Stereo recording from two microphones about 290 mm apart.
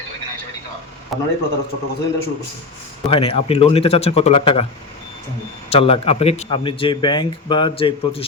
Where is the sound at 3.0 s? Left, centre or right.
Centre.